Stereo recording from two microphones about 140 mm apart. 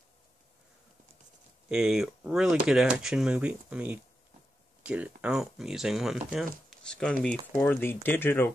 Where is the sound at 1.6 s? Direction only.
5° right (ahead or behind).